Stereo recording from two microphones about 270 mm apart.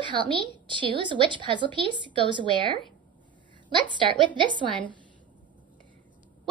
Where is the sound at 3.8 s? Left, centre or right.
Centre.